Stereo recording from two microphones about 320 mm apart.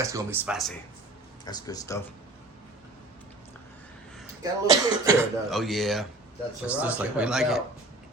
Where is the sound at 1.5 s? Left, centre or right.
Centre.